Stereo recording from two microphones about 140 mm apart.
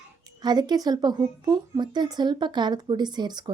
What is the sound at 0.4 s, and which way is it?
A woman's voice, 30° right (ahead or behind).